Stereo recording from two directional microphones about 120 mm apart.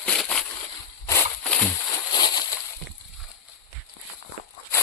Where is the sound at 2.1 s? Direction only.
35° left (ahead or behind).